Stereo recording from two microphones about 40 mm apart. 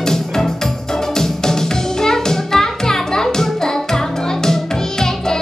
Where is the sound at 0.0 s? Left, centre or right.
Centre.